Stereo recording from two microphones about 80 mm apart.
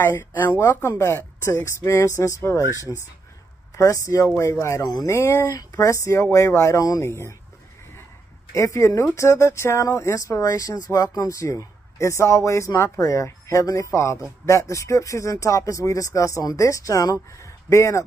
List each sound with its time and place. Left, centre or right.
0.0 s speech: left
5.1 s speech: left
8.5 s speech: left